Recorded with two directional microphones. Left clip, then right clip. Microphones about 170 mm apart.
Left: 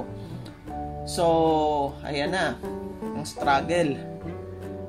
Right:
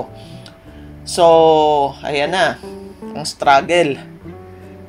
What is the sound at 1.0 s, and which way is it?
Speech, 35° right (ahead or behind).